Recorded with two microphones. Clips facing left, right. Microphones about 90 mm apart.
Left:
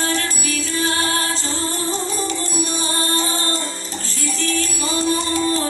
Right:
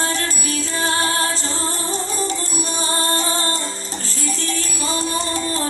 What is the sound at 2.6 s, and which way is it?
Music, 35° right (ahead or behind).